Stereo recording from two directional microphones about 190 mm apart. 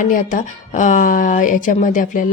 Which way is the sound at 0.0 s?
45° left (ahead or behind).